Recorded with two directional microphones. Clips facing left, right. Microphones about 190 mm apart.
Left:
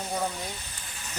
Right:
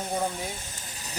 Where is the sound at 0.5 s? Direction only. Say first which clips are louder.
Right 2 dB; 45° right (ahead or behind).